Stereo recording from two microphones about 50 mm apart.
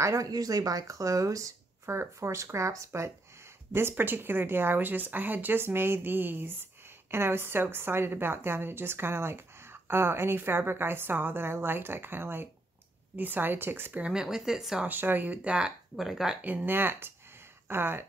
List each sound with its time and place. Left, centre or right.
0.8 s speech: right
3.9 s a woman's voice: right
14.1 s speech: centre
14.9 s speech: right
16.0 s speech: centre
16.3 s a woman's voice: right